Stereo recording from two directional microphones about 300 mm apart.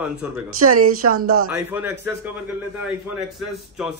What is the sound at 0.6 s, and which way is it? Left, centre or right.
Speech, right.